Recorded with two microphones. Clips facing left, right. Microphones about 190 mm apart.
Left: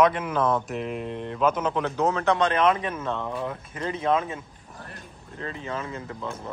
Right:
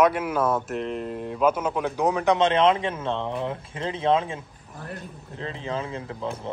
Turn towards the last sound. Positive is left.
turn(degrees=-30)  # may be behind; listen again after turning